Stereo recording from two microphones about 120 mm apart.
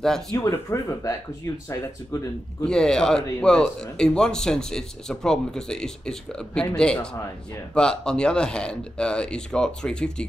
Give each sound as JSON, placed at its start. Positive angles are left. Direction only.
{"t": 0.0, "sound": "speech", "side_deg": 5}
{"t": 0.4, "sound": "speech", "side_deg": 25}
{"t": 2.6, "sound": "speech", "side_deg": 5}